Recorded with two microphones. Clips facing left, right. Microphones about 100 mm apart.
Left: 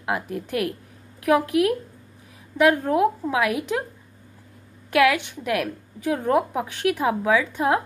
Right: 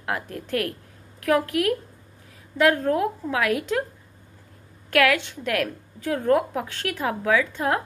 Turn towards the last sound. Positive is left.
turn(degrees=20)  # may be behind; listen again after turning